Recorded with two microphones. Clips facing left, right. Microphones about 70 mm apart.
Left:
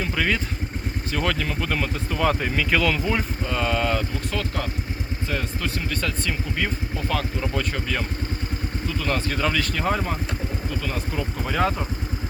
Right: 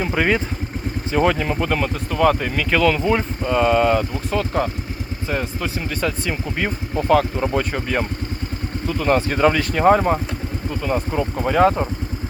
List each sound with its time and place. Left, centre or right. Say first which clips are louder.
0.0 s speech: right 5 dB; right
1.1 s speech: right 7 dB; right
1.6 s speech: right 5 dB; centre
3.0 s speech: right 6 dB; centre
4.4 s speech: right 9 dB; right
5.9 s speech: right 4 dB; centre
6.6 s speech: right 4 dB; right
7.7 s speech: right 5 dB; right
10.8 s speech: right 10 dB; right